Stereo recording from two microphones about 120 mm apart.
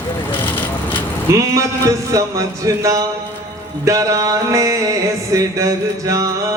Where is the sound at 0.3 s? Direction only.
15° left (ahead or behind).